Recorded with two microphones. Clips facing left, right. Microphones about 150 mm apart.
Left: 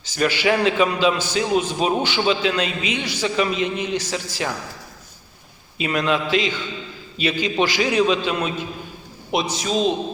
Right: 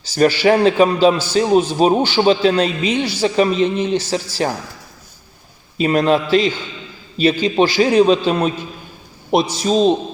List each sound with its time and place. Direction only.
0.0 s a man's voice: 35° right (ahead or behind)
5.7 s a man's voice: 40° right (ahead or behind)